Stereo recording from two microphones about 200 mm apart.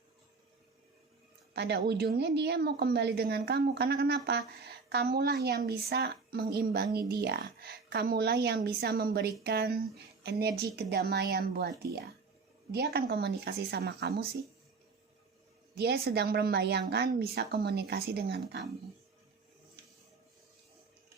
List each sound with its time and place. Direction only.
1.5 s a woman's voice: 55° right (ahead or behind)
12.7 s a woman's voice: 50° right (ahead or behind)
15.7 s a woman's voice: 55° right (ahead or behind)